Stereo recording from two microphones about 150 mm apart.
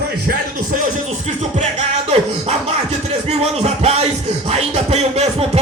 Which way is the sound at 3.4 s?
45° right (ahead or behind).